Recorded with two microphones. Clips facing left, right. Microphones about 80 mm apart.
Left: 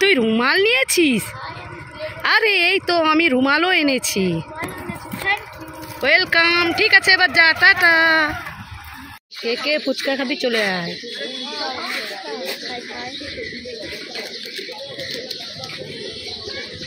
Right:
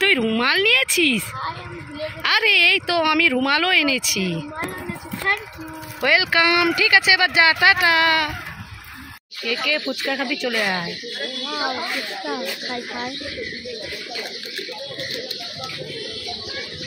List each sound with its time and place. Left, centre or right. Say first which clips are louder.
0.0 s a sound: left 4 dB; centre
0.4 s a woman's voice: left 3 dB; centre
2.2 s speech: left 3 dB; left
3.0 s a woman's voice: left 3 dB; centre; by 4.4 s left
5.3 s a sound: even; right
6.1 s speech: left 2 dB; left
6.4 s speech: even; centre
6.9 s speech: left 2 dB; left
7.8 s speech: left 3 dB; left
9.4 s speech: left 3 dB; centre